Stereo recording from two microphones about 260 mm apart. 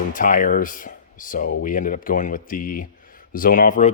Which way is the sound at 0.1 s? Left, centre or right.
Left.